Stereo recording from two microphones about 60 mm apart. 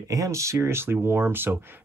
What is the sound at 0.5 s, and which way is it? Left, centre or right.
Speech, right.